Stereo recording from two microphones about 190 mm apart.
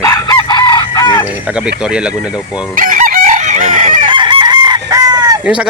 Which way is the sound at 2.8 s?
45° right (ahead or behind).